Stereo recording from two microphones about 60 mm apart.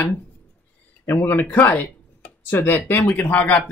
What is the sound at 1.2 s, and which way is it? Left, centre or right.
Speech, left.